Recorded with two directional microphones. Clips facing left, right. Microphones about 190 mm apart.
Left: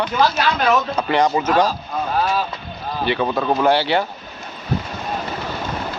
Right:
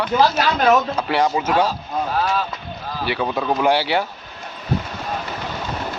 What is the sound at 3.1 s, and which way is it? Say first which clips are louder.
Speech: left 2 dB; 5° right (ahead or behind).